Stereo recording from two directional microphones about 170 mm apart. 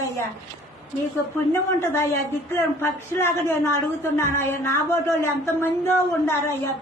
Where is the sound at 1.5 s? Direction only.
15° left (ahead or behind).